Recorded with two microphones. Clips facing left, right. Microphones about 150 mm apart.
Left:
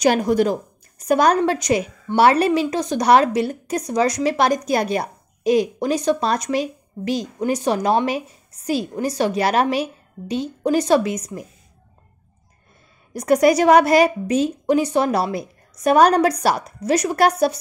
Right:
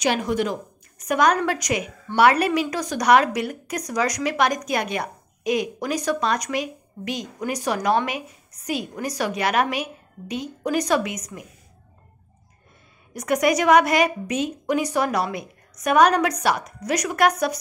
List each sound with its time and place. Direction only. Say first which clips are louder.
0.0 s a woman's voice: left 6 dB; 40° left (ahead or behind)
13.1 s a woman's voice: left 5 dB; 35° left (ahead or behind)